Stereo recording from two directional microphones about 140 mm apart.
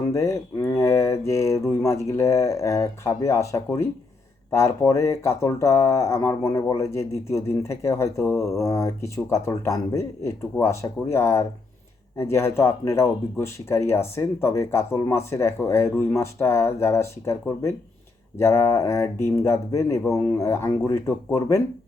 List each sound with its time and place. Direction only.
0.1 s speech: 20° left (ahead or behind)
18.3 s speech: 20° left (ahead or behind)